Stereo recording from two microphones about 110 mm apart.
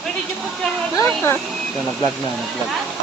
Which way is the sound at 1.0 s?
25° left (ahead or behind).